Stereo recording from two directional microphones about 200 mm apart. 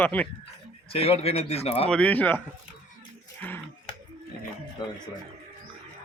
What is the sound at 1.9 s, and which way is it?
Speech, 5° left (ahead or behind).